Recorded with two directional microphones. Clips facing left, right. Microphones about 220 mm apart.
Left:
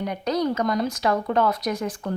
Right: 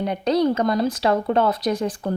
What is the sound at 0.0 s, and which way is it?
Speech, 30° right (ahead or behind).